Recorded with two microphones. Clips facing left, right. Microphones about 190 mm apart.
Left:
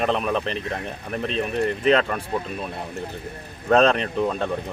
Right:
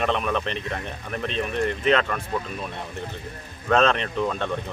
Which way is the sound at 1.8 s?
35° left (ahead or behind).